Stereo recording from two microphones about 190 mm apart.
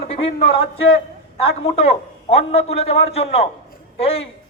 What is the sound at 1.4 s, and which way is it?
A man's voice, 30° left (ahead or behind).